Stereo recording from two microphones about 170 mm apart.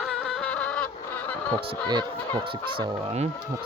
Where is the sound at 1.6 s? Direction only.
25° right (ahead or behind).